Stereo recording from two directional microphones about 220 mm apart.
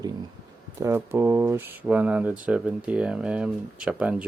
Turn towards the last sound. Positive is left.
turn(degrees=-5)  # may be behind; listen again after turning